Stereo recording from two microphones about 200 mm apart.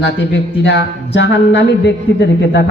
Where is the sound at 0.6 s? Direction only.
60° left (ahead or behind).